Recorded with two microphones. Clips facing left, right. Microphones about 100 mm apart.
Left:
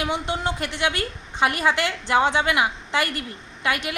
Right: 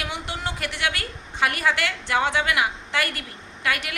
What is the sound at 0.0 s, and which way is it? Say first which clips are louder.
A woman's voice: left 5 dB; 25° left (ahead or behind).